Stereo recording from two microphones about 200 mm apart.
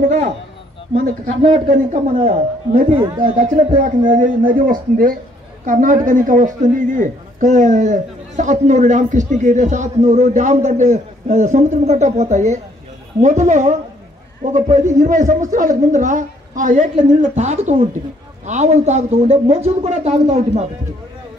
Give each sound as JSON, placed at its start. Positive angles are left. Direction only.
{"t": 1.7, "sound": "a man's voice", "side_deg": -35}